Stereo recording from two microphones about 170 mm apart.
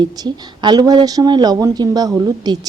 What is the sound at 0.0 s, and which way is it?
Speech, 25° right (ahead or behind).